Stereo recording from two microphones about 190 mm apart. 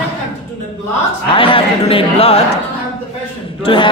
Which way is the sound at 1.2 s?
30° left (ahead or behind).